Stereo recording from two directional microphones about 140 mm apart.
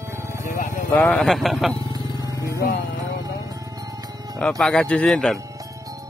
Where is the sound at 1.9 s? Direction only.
25° right (ahead or behind).